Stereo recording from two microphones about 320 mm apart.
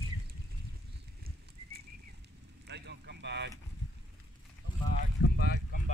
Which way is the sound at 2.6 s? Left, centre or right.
Right.